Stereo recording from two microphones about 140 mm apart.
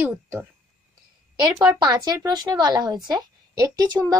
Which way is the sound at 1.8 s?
30° right (ahead or behind).